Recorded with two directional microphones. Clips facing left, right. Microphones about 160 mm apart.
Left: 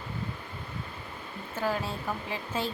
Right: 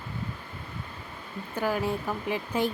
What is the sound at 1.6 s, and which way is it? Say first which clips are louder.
Speech: right 3 dB; 15° right (ahead or behind).